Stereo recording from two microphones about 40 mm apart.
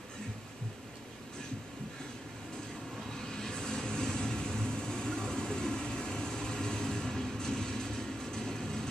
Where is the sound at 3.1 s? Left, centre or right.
Centre.